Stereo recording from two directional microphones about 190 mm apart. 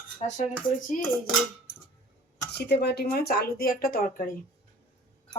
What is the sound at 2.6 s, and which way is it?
Speech, 60° left (ahead or behind).